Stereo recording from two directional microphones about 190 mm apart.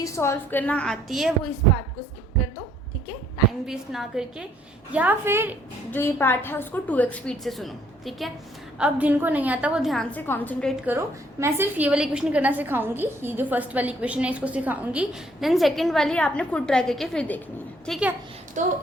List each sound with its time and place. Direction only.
0.0 s a woman's voice: 15° left (ahead or behind)
3.7 s a woman's voice: centre (ahead or behind)
5.9 s a woman's voice: 10° left (ahead or behind)
10.8 s a woman's voice: 15° right (ahead or behind)
18.6 s speech: 40° right (ahead or behind)